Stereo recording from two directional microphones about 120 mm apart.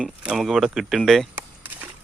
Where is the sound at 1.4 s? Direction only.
15° right (ahead or behind).